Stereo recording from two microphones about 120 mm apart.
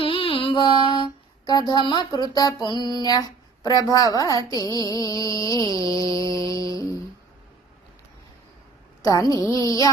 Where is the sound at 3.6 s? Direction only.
30° left (ahead or behind).